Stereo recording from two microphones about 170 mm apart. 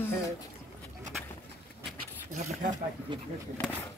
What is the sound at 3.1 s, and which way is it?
Speech, 25° right (ahead or behind).